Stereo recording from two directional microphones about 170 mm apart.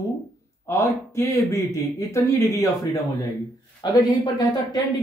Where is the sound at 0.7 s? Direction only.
15° left (ahead or behind).